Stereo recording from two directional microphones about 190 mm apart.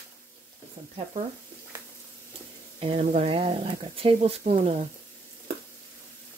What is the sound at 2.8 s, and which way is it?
Speech, 35° right (ahead or behind).